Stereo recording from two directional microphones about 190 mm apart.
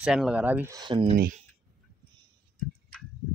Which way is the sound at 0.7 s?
25° right (ahead or behind).